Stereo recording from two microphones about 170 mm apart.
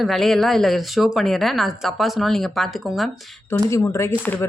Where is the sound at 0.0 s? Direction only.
Centre (ahead or behind).